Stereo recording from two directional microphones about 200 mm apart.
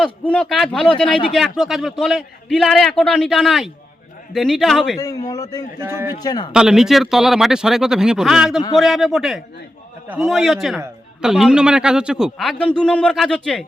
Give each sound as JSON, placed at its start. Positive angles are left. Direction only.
{"t": 0.0, "sound": "a man's voice", "side_deg": 5}
{"t": 4.9, "sound": "a man's voice", "side_deg": 15}
{"t": 5.8, "sound": "speech", "side_deg": -10}
{"t": 6.1, "sound": "speech", "side_deg": 20}
{"t": 6.5, "sound": "a man's voice", "side_deg": -5}